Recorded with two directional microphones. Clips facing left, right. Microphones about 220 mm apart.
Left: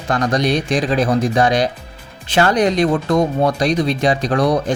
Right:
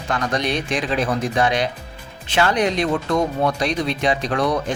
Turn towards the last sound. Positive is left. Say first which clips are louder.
# left 4 dB
turn(degrees=40)  # may be behind; listen again after turning